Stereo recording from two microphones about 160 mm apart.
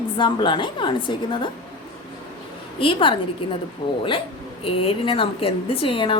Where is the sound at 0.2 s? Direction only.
30° left (ahead or behind).